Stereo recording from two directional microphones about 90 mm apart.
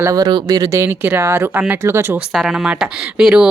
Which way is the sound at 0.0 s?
40° right (ahead or behind).